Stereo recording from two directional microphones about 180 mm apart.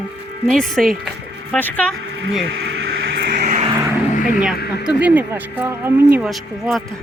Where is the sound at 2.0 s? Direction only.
90° right.